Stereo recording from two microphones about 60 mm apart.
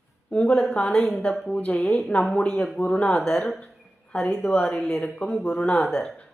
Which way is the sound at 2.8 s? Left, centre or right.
Left.